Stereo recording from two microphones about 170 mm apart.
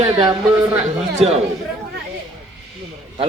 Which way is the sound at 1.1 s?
40° right (ahead or behind).